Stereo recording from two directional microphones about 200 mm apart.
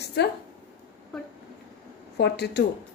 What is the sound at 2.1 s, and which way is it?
Speech, 55° left (ahead or behind).